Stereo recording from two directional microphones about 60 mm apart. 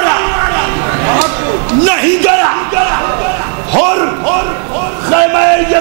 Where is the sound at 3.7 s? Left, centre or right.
Right.